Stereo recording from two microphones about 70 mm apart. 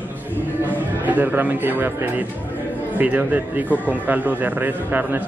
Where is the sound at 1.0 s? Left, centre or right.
Right.